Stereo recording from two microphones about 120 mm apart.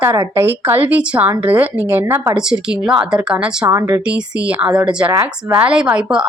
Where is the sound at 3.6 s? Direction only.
25° right (ahead or behind).